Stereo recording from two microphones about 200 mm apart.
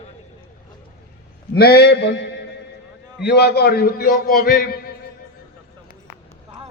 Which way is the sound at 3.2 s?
55° left (ahead or behind).